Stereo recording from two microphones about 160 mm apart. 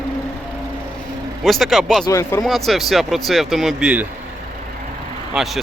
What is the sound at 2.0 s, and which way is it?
Speech, 20° left (ahead or behind).